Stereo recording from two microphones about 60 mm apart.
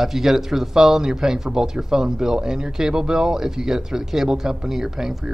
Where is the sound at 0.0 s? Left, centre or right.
Centre.